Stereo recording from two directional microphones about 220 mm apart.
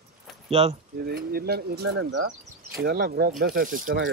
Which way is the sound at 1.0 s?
45° right (ahead or behind).